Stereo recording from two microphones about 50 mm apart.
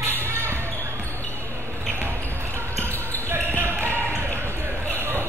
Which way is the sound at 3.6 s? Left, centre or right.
Right.